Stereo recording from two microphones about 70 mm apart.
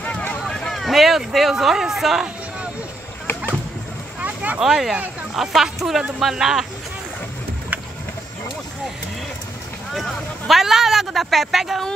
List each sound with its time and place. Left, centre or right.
0.0 s run: centre
0.5 s a sound: centre
0.8 s a man's voice: centre
4.2 s a sound: right
4.6 s a man's voice: centre
9.9 s a man's voice: centre